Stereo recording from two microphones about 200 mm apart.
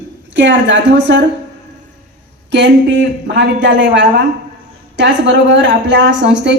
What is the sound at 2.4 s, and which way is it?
A woman's voice, 65° right (ahead or behind).